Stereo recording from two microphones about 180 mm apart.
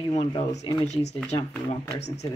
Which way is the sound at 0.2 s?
35° left (ahead or behind).